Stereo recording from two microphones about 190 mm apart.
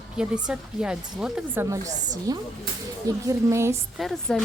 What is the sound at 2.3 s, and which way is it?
A woman's voice, 20° right (ahead or behind).